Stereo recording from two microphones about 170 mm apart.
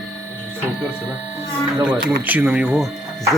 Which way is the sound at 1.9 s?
10° right (ahead or behind).